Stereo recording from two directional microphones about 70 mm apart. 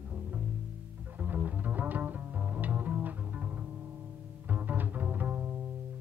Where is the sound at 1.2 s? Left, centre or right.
Right.